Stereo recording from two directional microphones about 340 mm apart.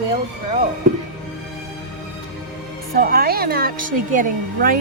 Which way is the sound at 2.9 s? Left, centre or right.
Right.